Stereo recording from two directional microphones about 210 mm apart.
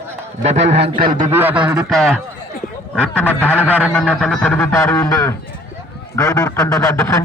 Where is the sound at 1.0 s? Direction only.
40° right (ahead or behind).